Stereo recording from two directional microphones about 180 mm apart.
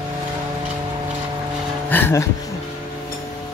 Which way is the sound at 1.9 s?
10° left (ahead or behind).